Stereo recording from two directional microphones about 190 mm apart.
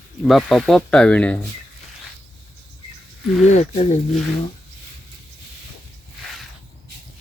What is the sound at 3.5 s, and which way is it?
Speech, 35° left (ahead or behind).